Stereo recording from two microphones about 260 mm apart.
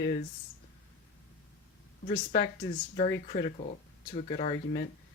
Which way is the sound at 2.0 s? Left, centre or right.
Left.